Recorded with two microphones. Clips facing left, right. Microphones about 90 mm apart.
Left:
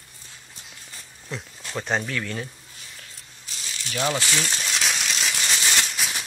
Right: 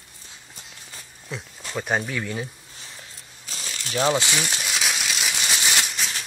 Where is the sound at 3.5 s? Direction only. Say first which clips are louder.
Right 2 dB; 45° right (ahead or behind).